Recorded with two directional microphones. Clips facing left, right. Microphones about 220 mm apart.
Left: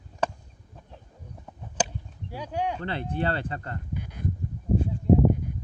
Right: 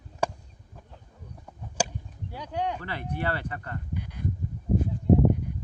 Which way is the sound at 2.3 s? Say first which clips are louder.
Left 1 dB; 10° left (ahead or behind).